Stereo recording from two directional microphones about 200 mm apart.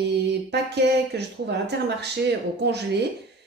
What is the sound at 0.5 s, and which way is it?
Speech, 55° right (ahead or behind).